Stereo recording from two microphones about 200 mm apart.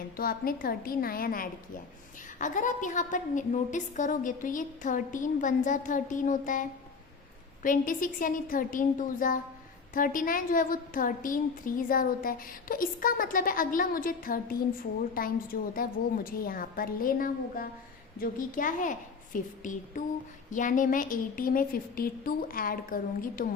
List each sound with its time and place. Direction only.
0.2 s a woman's voice: 45° left (ahead or behind)